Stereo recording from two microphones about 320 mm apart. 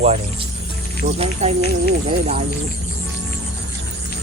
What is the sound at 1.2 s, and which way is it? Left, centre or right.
Speech, centre.